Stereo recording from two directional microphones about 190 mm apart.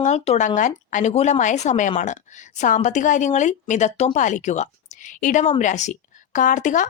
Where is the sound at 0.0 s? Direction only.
40° left (ahead or behind).